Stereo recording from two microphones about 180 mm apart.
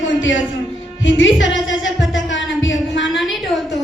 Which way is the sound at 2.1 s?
90° left.